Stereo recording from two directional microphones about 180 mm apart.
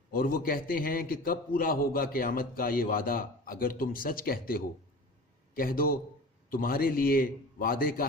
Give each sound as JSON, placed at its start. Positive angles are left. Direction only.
{"t": 0.1, "sound": "a man's voice", "side_deg": 55}